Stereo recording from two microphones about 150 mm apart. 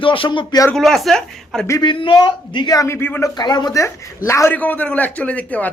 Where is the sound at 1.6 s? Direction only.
20° left (ahead or behind).